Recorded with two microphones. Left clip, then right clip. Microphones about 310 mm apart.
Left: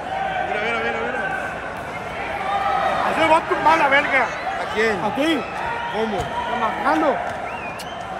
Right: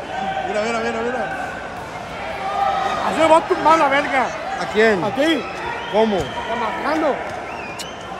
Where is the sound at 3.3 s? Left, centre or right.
Right.